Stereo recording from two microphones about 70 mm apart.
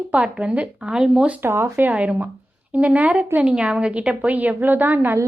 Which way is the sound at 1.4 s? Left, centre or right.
Right.